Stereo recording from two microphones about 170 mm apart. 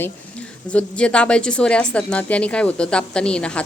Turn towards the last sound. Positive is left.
turn(degrees=5)  # may be behind; listen again after turning